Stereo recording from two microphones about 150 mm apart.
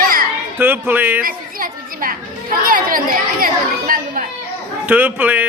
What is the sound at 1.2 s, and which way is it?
Chatter, 70° right (ahead or behind).